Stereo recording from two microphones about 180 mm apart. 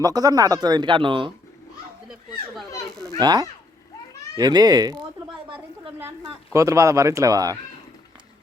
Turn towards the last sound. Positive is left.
turn(degrees=-20)  # may be behind; listen again after turning